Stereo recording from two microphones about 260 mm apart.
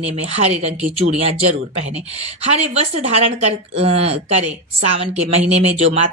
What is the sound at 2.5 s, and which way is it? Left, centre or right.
Speech, right.